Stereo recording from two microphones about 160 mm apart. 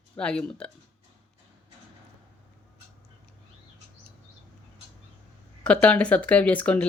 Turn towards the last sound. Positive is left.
turn(degrees=10)  # may be behind; listen again after turning